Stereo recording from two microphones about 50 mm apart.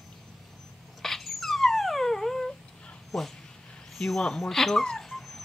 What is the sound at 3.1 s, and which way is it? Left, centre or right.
Speech, centre.